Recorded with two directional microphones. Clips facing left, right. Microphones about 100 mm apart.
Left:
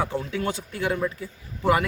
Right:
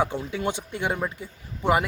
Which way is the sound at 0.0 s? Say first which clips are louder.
Right 1 dB; 20° right (ahead or behind).